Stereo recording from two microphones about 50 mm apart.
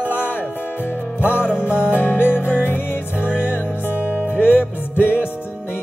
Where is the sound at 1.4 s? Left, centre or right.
Right.